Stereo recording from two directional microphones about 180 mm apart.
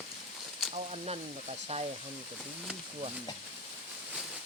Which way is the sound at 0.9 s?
35° right (ahead or behind).